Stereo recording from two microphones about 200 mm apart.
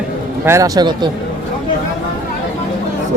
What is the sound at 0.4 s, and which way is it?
Speech, 15° right (ahead or behind).